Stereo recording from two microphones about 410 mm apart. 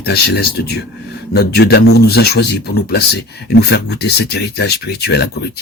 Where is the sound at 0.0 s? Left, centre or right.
Left.